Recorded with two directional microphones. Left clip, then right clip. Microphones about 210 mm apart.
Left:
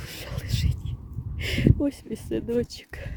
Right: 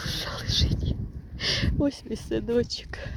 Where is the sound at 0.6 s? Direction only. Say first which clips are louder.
Right 6 dB; 35° left (ahead or behind).